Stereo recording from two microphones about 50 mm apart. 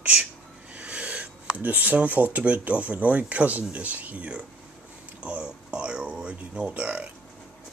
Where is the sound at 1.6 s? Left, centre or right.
Right.